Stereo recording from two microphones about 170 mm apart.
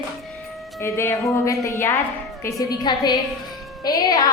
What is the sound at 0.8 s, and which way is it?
A woman's voice, 15° left (ahead or behind).